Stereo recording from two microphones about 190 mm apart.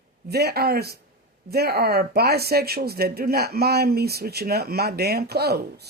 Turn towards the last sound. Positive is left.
turn(degrees=-55)  # may be behind; listen again after turning